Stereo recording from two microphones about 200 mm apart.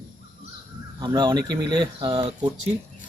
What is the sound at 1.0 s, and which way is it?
Speech, 20° right (ahead or behind).